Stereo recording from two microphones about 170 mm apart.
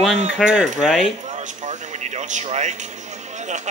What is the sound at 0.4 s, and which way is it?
Speech, centre (ahead or behind).